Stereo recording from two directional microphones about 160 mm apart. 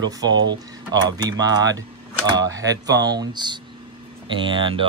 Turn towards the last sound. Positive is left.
turn(degrees=-35)  # may be behind; listen again after turning